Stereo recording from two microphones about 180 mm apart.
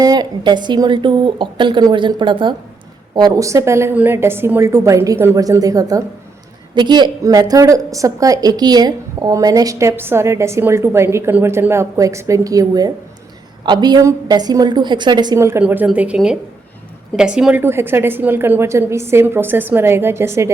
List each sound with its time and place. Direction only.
0.0 s a woman's voice: 20° right (ahead or behind)